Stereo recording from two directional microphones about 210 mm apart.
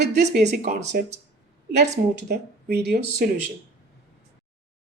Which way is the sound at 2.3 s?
50° right (ahead or behind).